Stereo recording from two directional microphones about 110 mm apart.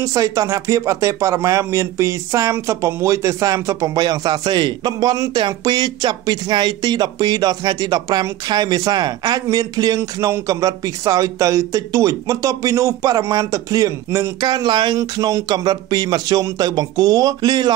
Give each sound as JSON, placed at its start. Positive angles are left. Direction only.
{"t": 0.0, "sound": "a man's voice", "side_deg": -30}